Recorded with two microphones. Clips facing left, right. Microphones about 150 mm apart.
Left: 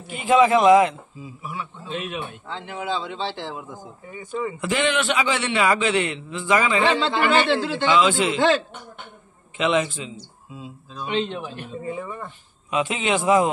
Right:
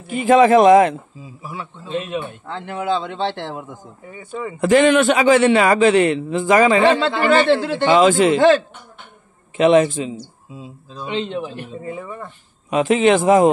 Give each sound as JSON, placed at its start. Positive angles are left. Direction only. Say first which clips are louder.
{"t": 0.1, "sound": "a man's voice", "louder": "right 5 dB", "side_deg": -45}
{"t": 1.4, "sound": "a man's voice", "louder": "right 2 dB", "side_deg": -30}
{"t": 2.4, "sound": "speech", "louder": "right 6 dB", "side_deg": -55}
{"t": 4.6, "sound": "a man's voice", "louder": "right 11 dB", "side_deg": -45}
{"t": 9.6, "sound": "a man's voice", "louder": "right 9 dB", "side_deg": -45}
{"t": 11.0, "sound": "a man's voice", "louder": "right 2 dB", "side_deg": -25}
{"t": 12.6, "sound": "a man's voice", "louder": "right 9 dB", "side_deg": -45}